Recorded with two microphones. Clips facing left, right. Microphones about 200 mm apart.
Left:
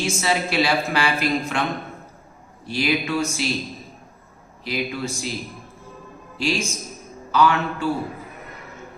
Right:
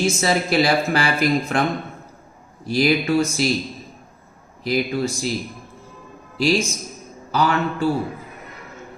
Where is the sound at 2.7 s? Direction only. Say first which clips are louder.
Right 5 dB; 40° right (ahead or behind).